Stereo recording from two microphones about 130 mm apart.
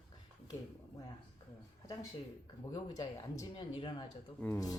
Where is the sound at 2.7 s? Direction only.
35° left (ahead or behind).